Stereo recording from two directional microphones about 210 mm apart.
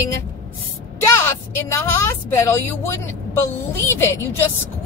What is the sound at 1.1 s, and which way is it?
A woman's voice, 10° left (ahead or behind).